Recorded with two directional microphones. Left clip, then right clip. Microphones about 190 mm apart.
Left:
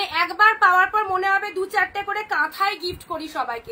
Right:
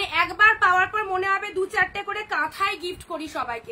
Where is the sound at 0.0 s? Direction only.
15° right (ahead or behind).